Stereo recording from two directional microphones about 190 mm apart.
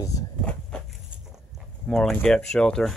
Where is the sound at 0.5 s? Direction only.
5° left (ahead or behind).